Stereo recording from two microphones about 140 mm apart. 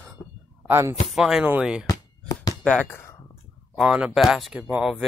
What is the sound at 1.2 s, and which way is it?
Speech, 5° right (ahead or behind).